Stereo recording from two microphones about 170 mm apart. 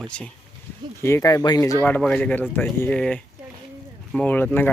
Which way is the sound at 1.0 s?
15° left (ahead or behind).